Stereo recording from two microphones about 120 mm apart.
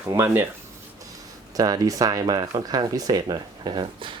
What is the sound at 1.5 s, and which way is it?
Speech, 30° right (ahead or behind).